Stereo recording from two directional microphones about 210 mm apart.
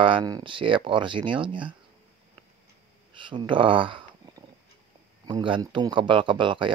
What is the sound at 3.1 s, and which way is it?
Speech, 25° right (ahead or behind).